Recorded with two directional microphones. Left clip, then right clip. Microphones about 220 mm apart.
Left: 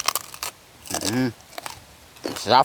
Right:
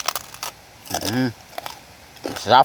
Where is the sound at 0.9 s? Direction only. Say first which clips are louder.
Right 2 dB; 30° left (ahead or behind).